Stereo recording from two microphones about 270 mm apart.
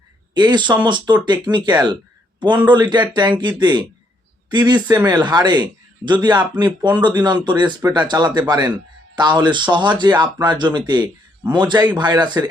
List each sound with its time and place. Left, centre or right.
0.3 s speech: centre